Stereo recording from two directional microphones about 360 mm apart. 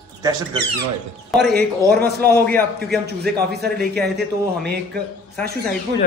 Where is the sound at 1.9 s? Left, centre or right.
Right.